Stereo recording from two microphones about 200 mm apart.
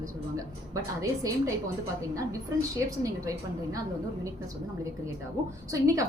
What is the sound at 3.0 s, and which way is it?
Speech, 15° right (ahead or behind).